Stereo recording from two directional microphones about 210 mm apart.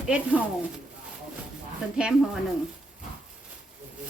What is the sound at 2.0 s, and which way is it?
Speech, 5° right (ahead or behind).